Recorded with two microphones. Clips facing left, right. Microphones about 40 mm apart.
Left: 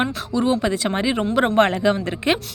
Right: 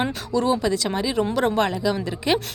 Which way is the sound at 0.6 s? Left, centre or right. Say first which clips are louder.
Left 2 dB; left.